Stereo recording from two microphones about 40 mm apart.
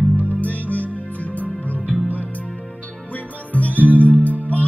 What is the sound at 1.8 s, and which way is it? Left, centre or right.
Music, centre.